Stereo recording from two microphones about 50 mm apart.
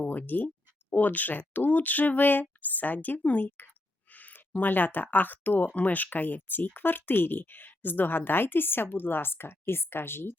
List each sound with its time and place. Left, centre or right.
0.0 s speech: left
4.1 s a sound: left
5.1 s speech: left